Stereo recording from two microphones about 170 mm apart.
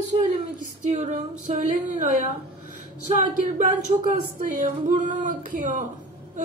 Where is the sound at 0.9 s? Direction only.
50° right (ahead or behind).